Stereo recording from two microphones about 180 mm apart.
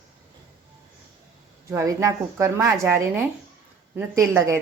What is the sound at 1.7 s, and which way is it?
Speech, 15° right (ahead or behind).